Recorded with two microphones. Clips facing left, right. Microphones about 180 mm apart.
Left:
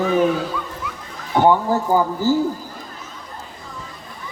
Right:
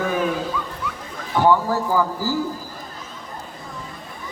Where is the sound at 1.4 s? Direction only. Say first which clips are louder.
Left 2 dB; 25° left (ahead or behind).